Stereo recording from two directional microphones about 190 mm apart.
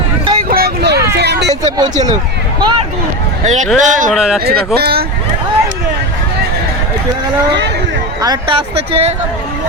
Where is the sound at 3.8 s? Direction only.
40° right (ahead or behind).